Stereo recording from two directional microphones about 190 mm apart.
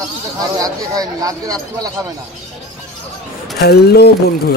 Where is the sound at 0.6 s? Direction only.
20° right (ahead or behind).